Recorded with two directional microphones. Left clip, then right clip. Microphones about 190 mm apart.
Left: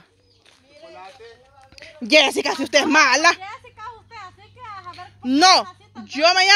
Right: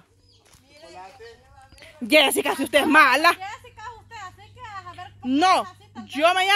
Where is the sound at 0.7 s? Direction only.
75° right (ahead or behind).